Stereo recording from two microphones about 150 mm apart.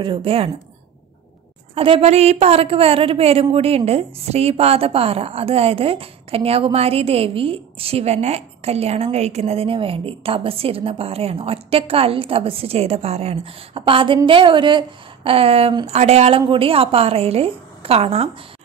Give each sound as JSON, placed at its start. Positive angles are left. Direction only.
{"t": 0.0, "sound": "a woman's voice", "side_deg": -35}
{"t": 1.8, "sound": "a woman's voice", "side_deg": -40}